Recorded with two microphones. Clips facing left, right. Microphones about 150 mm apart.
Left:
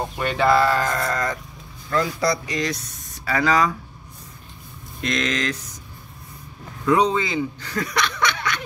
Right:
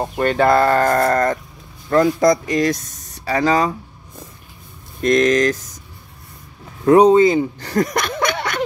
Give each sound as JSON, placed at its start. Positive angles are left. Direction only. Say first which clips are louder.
{"t": 0.2, "sound": "speech", "louder": "right 4 dB", "side_deg": -45}
{"t": 3.3, "sound": "speech", "louder": "right 3 dB", "side_deg": -30}
{"t": 5.0, "sound": "speech", "louder": "right 10 dB", "side_deg": -45}
{"t": 6.9, "sound": "speech", "louder": "right 9 dB", "side_deg": -45}